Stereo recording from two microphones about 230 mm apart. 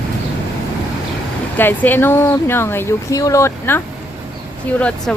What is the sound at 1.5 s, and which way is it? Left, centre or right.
Speech, centre.